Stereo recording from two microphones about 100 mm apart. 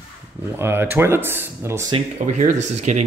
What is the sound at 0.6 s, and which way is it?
Speech, 20° right (ahead or behind).